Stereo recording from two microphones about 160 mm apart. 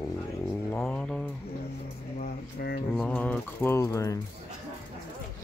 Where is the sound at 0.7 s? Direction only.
10° left (ahead or behind).